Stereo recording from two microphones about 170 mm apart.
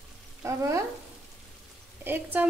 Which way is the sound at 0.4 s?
15° right (ahead or behind).